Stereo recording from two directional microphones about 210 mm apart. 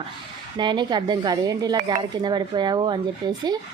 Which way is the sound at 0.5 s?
20° right (ahead or behind).